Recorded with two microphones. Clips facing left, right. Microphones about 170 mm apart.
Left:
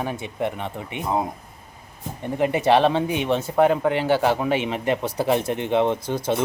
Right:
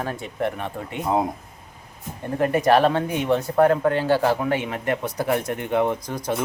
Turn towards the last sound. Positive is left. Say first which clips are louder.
# left 3 dB
turn(degrees=25)  # may be behind; listen again after turning